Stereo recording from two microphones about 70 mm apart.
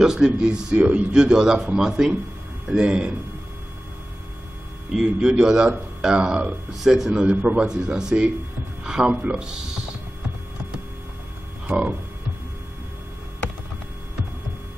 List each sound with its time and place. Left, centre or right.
0.0 s speech: centre
4.9 s speech: centre
6.7 s speech: centre
11.6 s a sound: centre